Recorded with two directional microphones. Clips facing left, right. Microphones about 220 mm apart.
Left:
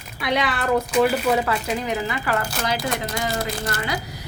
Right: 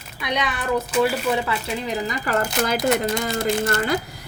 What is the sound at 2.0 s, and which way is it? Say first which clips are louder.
Speech: right 1 dB; 40° right (ahead or behind).